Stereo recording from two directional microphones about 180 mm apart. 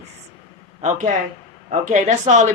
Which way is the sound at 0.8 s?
40° right (ahead or behind).